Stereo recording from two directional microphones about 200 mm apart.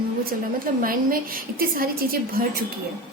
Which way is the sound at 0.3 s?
45° right (ahead or behind).